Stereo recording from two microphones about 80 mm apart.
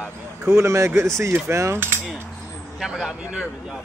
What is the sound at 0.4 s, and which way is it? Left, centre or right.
Speech, right.